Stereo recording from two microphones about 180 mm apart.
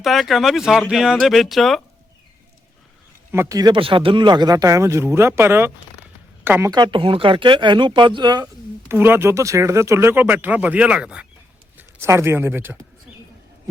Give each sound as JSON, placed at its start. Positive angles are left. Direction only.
{"t": 0.0, "sound": "speech", "side_deg": 0}
{"t": 3.3, "sound": "speech", "side_deg": -15}
{"t": 8.9, "sound": "speech", "side_deg": -10}